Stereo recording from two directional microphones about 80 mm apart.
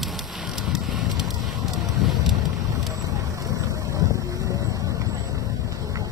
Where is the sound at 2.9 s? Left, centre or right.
Right.